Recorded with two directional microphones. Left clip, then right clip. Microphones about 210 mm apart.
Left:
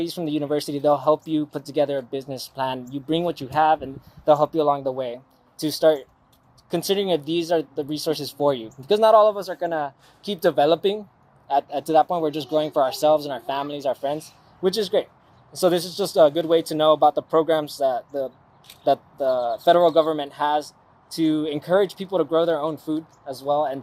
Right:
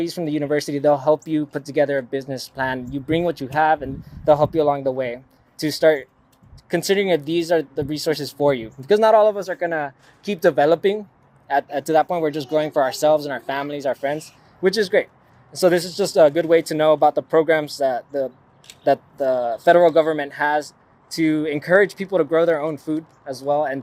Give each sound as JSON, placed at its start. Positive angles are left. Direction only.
{"t": 0.0, "sound": "speech", "side_deg": -15}